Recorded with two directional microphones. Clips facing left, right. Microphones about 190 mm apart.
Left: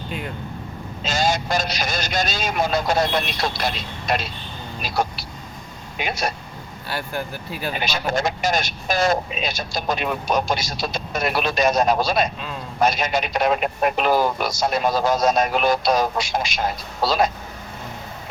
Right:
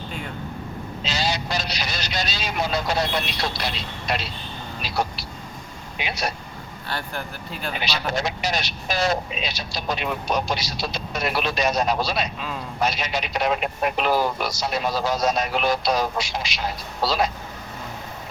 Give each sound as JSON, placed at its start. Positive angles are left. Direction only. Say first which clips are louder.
{"t": 1.0, "sound": "speech", "louder": "left 5 dB", "side_deg": 50}
{"t": 7.8, "sound": "speech", "louder": "left 3 dB", "side_deg": 50}